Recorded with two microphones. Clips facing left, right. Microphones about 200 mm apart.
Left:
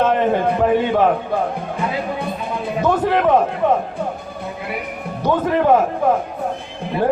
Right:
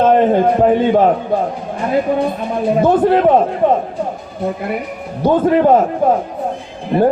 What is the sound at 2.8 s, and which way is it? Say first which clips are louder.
Speech: right 4 dB; 30° right (ahead or behind).